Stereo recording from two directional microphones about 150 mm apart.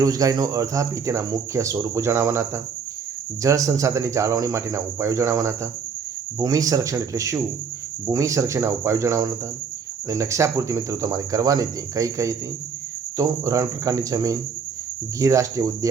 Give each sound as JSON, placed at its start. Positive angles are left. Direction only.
{"t": 0.0, "sound": "speech", "side_deg": -25}